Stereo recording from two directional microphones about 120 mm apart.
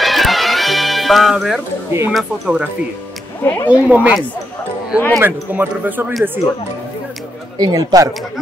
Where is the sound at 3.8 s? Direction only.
10° right (ahead or behind).